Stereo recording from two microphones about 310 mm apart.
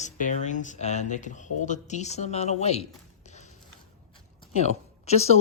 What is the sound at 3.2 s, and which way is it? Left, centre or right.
Music, left.